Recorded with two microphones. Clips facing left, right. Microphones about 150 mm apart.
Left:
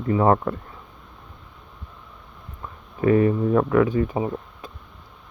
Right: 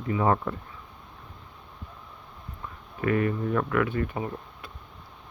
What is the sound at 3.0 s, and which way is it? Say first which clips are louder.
Speech: left 7 dB; 30° left (ahead or behind).